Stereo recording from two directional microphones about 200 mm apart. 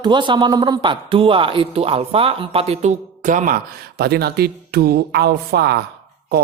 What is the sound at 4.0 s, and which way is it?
A man's voice, 55° right (ahead or behind).